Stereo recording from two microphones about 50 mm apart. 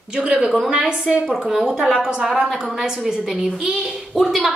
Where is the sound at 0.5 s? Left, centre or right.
Centre.